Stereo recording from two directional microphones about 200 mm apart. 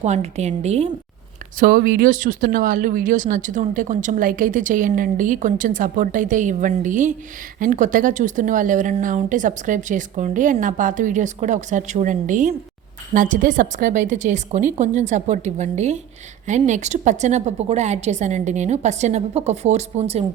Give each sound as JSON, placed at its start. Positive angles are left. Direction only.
{"t": 0.0, "sound": "speech", "side_deg": -35}
{"t": 1.5, "sound": "speech", "side_deg": -45}